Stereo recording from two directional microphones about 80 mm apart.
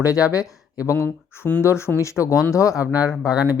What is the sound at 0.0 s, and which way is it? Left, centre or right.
Speech, left.